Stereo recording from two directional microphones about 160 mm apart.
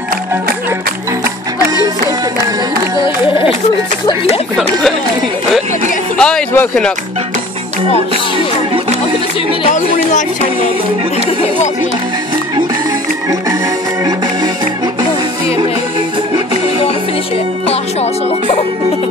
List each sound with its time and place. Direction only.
6.1 s speech: 5° left (ahead or behind)
9.7 s speech: 50° left (ahead or behind)